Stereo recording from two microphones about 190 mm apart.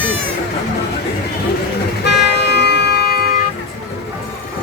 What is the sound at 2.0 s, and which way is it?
Vehicle, 65° left (ahead or behind).